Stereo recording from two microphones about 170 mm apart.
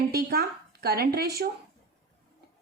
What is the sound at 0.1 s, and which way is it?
A woman's voice, 65° right (ahead or behind).